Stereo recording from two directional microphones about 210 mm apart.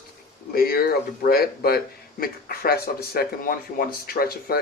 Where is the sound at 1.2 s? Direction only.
45° left (ahead or behind).